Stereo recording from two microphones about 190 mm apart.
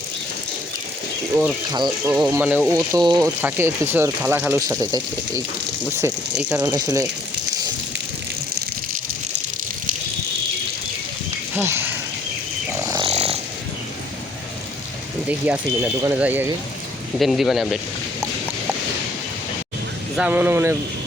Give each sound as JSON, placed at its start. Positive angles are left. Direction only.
{"t": 1.7, "sound": "speech", "side_deg": -20}
{"t": 2.4, "sound": "speech", "side_deg": -10}
{"t": 6.6, "sound": "speech", "side_deg": -20}
{"t": 11.5, "sound": "speech", "side_deg": -10}
{"t": 12.8, "sound": "a sound", "side_deg": -20}
{"t": 13.1, "sound": "snoring", "side_deg": -35}
{"t": 15.3, "sound": "speech", "side_deg": -10}
{"t": 20.1, "sound": "speech", "side_deg": -5}